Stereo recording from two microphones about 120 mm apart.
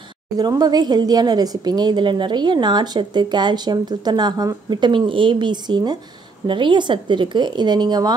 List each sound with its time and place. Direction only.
0.4 s a woman's voice: 35° right (ahead or behind)